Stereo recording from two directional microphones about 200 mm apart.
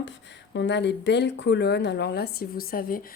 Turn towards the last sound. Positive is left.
turn(degrees=45)  # may be behind; listen again after turning